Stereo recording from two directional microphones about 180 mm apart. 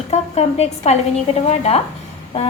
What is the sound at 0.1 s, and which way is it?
A woman's voice, 35° left (ahead or behind).